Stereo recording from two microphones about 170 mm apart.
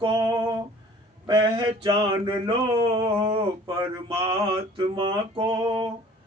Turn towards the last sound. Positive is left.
turn(degrees=-30)  # may be behind; listen again after turning